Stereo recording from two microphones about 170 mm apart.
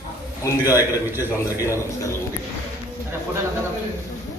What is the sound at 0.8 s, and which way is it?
Speech, 15° right (ahead or behind).